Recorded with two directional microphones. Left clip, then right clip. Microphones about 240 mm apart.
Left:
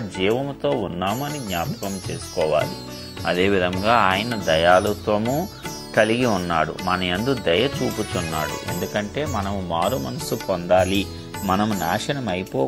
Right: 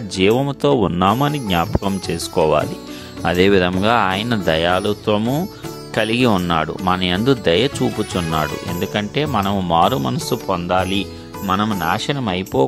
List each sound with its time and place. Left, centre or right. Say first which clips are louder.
0.2 s speech: right 6 dB; right
9.7 s speech: right 7 dB; right
10.3 s speech: left 1 dB; centre
11.4 s speech: right 3 dB; right
11.7 s speech: right 4 dB; centre